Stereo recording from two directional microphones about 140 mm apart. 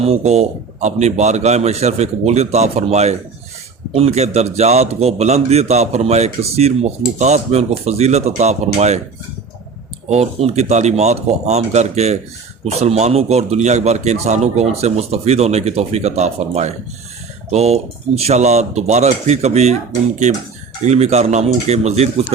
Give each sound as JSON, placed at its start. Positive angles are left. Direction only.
{"t": 0.0, "sound": "a man's voice", "side_deg": -50}
{"t": 10.1, "sound": "a man's voice", "side_deg": -50}
{"t": 20.8, "sound": "a man's voice", "side_deg": -50}